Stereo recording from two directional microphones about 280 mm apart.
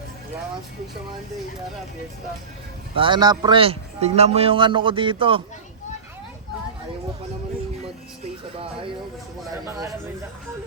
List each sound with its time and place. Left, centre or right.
3.0 s speech: centre
9.6 s speech: centre